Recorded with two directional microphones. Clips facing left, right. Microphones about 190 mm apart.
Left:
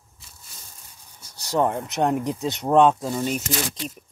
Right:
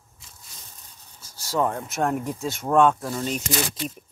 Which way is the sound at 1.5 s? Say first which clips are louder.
Left 2 dB; 15° left (ahead or behind).